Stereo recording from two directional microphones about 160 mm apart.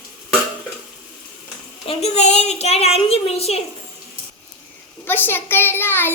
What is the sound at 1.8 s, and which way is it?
A woman's voice, 40° left (ahead or behind).